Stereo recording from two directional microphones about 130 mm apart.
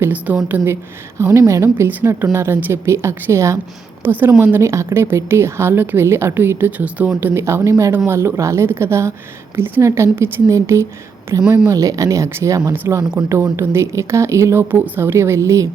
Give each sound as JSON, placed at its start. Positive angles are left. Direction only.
{"t": 0.0, "sound": "a woman's voice", "side_deg": -10}